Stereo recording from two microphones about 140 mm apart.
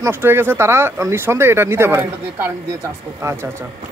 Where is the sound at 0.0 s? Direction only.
15° right (ahead or behind).